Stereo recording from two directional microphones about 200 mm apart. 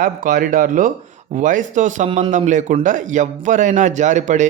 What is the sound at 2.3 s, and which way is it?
A man's voice, 35° right (ahead or behind).